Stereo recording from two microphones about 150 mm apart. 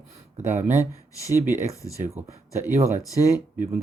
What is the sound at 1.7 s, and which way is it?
Speech, 20° left (ahead or behind).